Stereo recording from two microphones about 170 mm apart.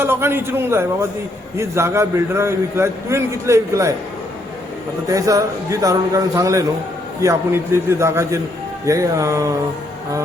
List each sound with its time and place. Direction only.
0.0 s a man's voice: 15° right (ahead or behind)
5.0 s a man's voice: 20° right (ahead or behind)